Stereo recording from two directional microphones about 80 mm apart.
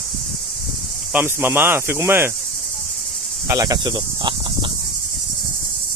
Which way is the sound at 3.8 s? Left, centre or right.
Right.